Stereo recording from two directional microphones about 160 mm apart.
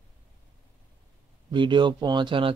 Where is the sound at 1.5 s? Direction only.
30° right (ahead or behind).